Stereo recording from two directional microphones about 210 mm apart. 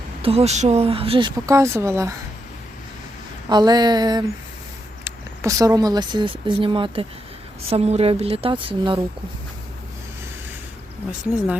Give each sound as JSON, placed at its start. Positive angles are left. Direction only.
{"t": 0.2, "sound": "speech", "side_deg": -30}
{"t": 3.5, "sound": "speech", "side_deg": -20}